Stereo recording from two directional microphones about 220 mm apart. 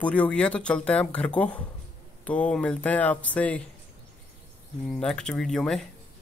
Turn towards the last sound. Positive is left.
turn(degrees=0)  # may be behind; listen again after turning